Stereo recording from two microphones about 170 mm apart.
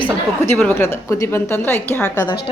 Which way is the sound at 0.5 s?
10° left (ahead or behind).